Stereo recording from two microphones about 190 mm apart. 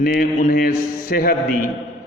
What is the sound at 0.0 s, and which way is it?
A man's voice, 50° left (ahead or behind).